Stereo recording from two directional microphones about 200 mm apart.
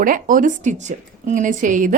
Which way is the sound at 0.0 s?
45° right (ahead or behind).